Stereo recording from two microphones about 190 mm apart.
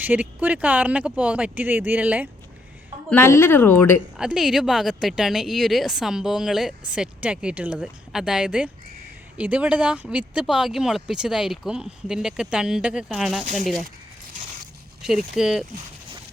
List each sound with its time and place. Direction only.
0.0 s speech: 10° right (ahead or behind)
3.1 s speech: 10° left (ahead or behind)
4.2 s a woman's voice: 5° right (ahead or behind)
13.4 s speech: 40° right (ahead or behind)
15.0 s a woman's voice: centre (ahead or behind)